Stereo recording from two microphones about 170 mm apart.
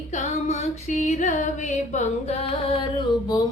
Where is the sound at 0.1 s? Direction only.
45° left (ahead or behind).